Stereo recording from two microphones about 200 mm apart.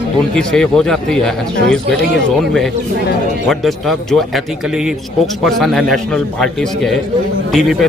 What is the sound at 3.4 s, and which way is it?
Speech, centre (ahead or behind).